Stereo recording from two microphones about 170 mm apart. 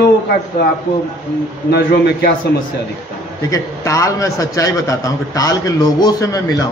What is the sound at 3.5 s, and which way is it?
A man's voice, 20° left (ahead or behind).